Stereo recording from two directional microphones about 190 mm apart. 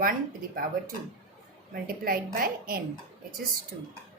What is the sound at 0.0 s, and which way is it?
Speech, 45° right (ahead or behind).